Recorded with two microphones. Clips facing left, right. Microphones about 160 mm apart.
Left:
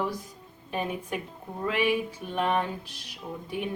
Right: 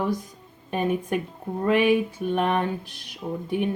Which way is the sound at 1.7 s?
55° right (ahead or behind).